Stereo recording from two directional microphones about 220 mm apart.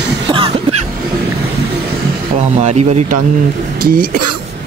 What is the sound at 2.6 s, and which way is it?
Speech, 30° right (ahead or behind).